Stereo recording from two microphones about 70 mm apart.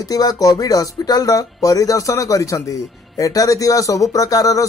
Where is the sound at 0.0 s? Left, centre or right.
Left.